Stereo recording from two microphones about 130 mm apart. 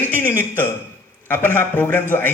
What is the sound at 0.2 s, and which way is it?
A man's voice, 15° left (ahead or behind).